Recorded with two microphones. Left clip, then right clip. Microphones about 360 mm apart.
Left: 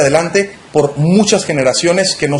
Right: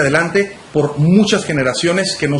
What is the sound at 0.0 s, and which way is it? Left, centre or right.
Speech, centre.